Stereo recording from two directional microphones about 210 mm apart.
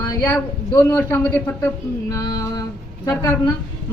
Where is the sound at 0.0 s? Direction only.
15° left (ahead or behind).